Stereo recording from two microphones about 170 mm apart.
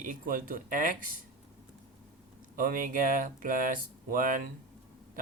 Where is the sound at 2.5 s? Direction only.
55° right (ahead or behind).